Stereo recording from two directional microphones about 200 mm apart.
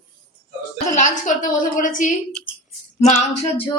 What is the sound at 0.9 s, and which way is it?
A woman's voice, 40° left (ahead or behind).